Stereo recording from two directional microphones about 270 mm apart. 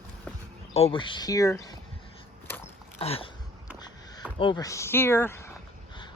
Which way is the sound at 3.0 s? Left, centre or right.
Left.